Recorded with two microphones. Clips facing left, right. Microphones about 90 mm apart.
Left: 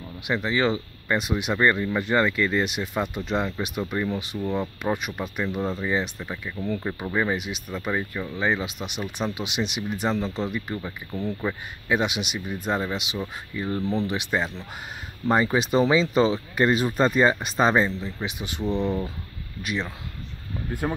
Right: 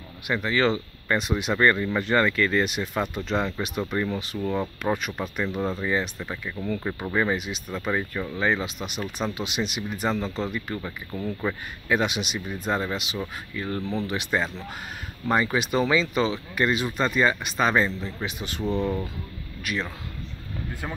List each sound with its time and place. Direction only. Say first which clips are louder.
0.3 s speech: even; 15° left (ahead or behind)
13.7 s speech: left 3 dB; centre (ahead or behind)
14.0 s speech: even; 15° left (ahead or behind)
17.7 s speech: left 1 dB; 15° left (ahead or behind)
18.6 s speech: even; 10° right (ahead or behind)
19.6 s speech: left 1 dB; 20° left (ahead or behind)